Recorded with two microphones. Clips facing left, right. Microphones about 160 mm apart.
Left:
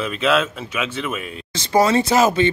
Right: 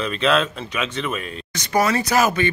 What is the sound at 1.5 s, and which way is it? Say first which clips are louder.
Speech: left 4 dB; 25° left (ahead or behind).